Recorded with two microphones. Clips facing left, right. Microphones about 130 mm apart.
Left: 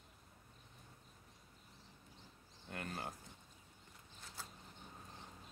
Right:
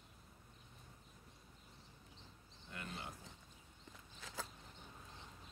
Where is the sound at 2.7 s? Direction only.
55° left (ahead or behind).